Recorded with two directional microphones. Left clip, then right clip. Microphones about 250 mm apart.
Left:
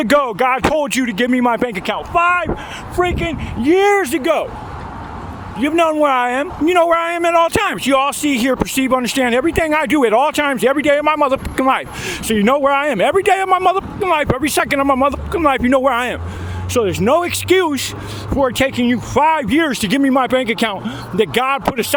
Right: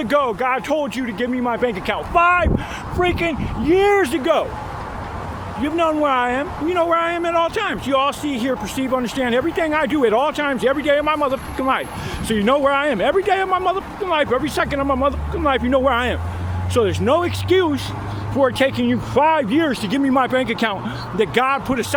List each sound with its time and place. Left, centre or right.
0.0 s a man's voice: left
2.1 s speech: centre
3.0 s speech: left
5.6 s a man's voice: left
18.5 s speech: left